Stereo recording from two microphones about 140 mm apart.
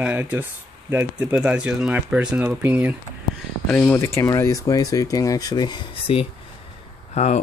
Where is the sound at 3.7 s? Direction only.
15° left (ahead or behind); by 6.2 s 35° left (ahead or behind).